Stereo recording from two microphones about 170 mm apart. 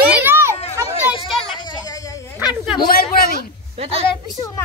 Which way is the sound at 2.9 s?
60° left (ahead or behind).